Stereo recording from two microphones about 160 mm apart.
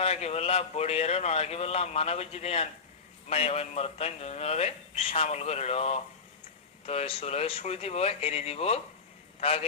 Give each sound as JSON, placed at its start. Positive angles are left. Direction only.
{"t": 0.0, "sound": "speech", "side_deg": 40}